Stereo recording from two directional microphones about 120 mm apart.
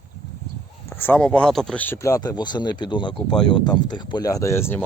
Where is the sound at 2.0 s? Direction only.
25° left (ahead or behind).